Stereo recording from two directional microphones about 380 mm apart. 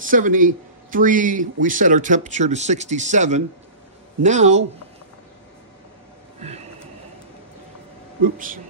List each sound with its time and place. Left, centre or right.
0.0 s speech: right
8.2 s speech: right